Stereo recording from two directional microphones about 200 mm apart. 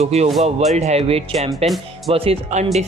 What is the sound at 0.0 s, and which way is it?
Speech, 30° right (ahead or behind).